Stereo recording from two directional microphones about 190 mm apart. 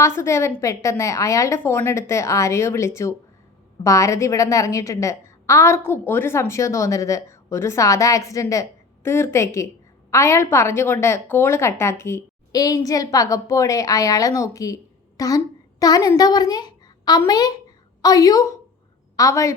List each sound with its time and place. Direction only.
0.0 s a woman's voice: 15° left (ahead or behind)